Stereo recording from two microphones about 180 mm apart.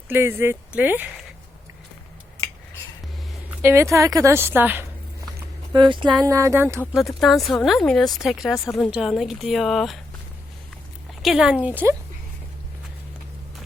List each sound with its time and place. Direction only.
0.1 s a woman's voice: 15° right (ahead or behind)
3.6 s a woman's voice: 15° right (ahead or behind)
5.7 s a woman's voice: 25° right (ahead or behind)
7.2 s speech: centre (ahead or behind)
11.2 s speech: centre (ahead or behind)